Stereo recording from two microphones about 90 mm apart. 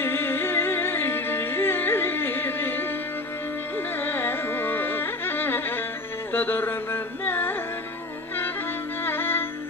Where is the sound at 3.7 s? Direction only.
25° left (ahead or behind).